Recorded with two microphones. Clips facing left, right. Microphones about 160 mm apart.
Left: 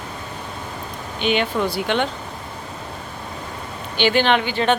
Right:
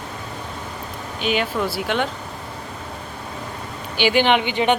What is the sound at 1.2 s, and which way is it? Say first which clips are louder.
Speech: left 2 dB; 5° right (ahead or behind).